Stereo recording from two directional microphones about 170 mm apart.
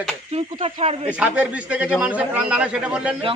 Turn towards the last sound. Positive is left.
turn(degrees=-5)  # may be behind; listen again after turning